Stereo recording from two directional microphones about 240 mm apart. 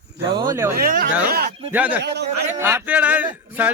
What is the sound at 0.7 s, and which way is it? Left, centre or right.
Speech, right.